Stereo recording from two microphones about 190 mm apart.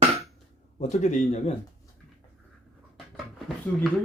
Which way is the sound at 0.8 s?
35° left (ahead or behind).